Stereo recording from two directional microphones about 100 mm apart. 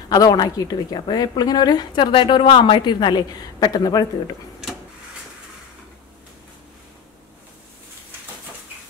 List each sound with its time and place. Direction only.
0.1 s a woman's voice: 40° left (ahead or behind)